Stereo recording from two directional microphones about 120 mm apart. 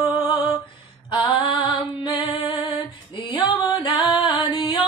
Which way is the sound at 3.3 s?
40° left (ahead or behind).